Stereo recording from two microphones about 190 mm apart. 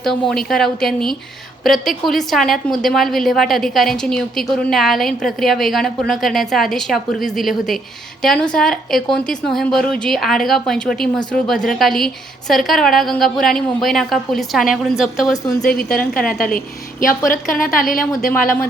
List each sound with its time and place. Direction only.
0.0 s a woman's voice: centre (ahead or behind)
16.3 s a woman's voice: 50° left (ahead or behind)